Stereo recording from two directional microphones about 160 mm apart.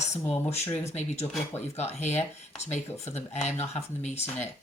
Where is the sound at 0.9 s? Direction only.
40° left (ahead or behind).